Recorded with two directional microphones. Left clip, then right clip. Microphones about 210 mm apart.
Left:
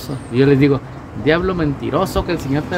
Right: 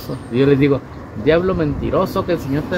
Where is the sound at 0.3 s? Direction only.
40° left (ahead or behind).